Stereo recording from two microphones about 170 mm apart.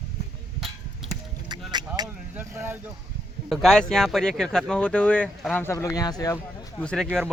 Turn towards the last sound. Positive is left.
turn(degrees=5)  # may be behind; listen again after turning